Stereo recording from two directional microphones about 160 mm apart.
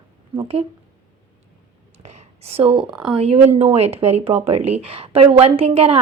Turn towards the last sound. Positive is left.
turn(degrees=-35)  # may be behind; listen again after turning